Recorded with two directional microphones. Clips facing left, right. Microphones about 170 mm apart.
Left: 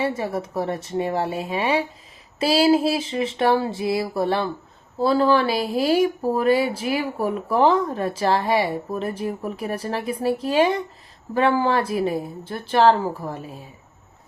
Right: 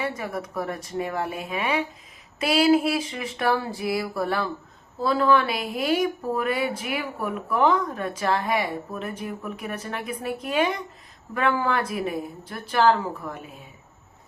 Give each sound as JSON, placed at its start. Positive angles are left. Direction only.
{"t": 0.0, "sound": "speech", "side_deg": 30}